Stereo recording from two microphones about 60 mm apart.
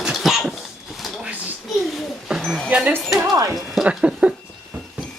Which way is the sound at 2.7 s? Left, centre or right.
Right.